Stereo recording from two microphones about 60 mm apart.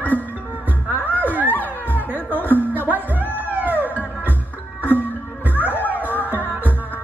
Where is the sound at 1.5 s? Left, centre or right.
Left.